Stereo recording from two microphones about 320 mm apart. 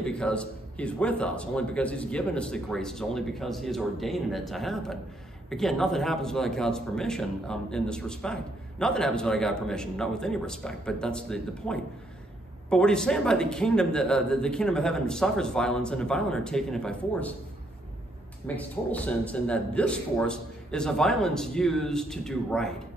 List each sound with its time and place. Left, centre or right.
0.0 s speech: centre
18.6 s speech: centre